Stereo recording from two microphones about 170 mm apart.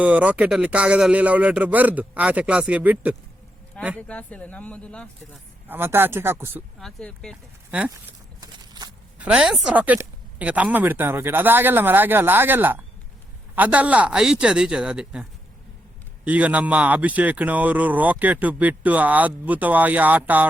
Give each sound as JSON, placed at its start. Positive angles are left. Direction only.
{"t": 0.0, "sound": "speech", "side_deg": -10}
{"t": 4.0, "sound": "speech", "side_deg": 10}
{"t": 5.6, "sound": "speech", "side_deg": -10}
{"t": 6.7, "sound": "speech", "side_deg": 5}
{"t": 7.7, "sound": "speech", "side_deg": -10}
{"t": 8.4, "sound": "a sound", "side_deg": -25}
{"t": 9.1, "sound": "speech", "side_deg": -5}